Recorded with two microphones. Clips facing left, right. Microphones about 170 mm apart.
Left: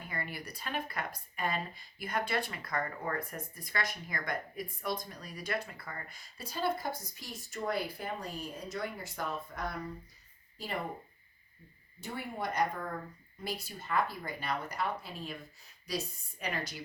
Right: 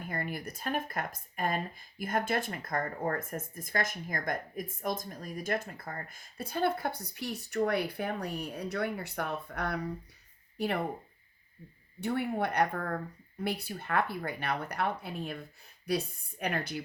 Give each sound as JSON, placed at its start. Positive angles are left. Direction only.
{"t": 0.0, "sound": "speech", "side_deg": -50}
{"t": 11.9, "sound": "speech", "side_deg": -60}